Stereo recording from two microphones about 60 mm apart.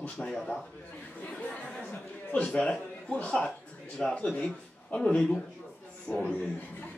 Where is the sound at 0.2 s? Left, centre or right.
Centre.